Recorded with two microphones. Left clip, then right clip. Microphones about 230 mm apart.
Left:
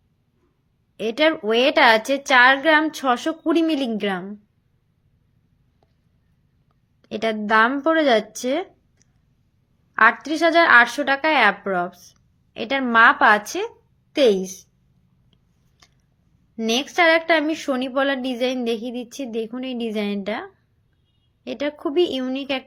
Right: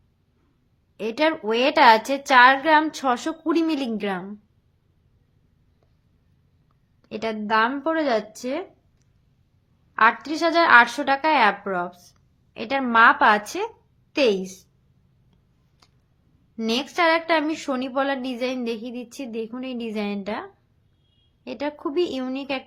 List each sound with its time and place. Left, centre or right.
0.9 s a woman's voice: centre
7.0 s a woman's voice: centre
15.8 s a sound: centre
16.6 s a woman's voice: centre